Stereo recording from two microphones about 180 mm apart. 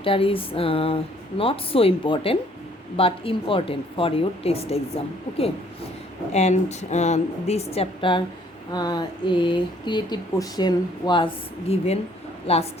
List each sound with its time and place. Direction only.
0.0 s speech: 30° left (ahead or behind)
6.3 s speech: 40° left (ahead or behind)